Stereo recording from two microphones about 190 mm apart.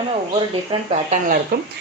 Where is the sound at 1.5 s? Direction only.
55° right (ahead or behind).